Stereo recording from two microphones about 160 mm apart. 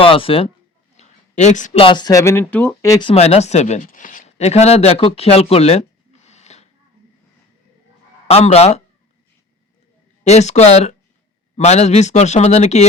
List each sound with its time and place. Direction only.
0.0 s speech: 35° left (ahead or behind)
0.9 s a sound: 45° left (ahead or behind)
1.8 s speech: 30° left (ahead or behind); by 2.9 s 10° left (ahead or behind)
2.9 s speech: 30° left (ahead or behind)
3.8 s speech: 55° left (ahead or behind); by 5.8 s 40° left (ahead or behind)
6.2 s a sound: 45° left (ahead or behind)
8.3 s speech: 40° left (ahead or behind)
10.2 s speech: 45° left (ahead or behind)